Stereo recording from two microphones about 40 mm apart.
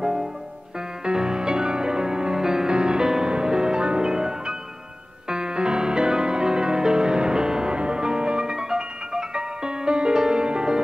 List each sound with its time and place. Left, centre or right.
0.0 s music: centre